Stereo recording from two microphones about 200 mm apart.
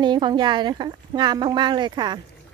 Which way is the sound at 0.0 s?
20° right (ahead or behind).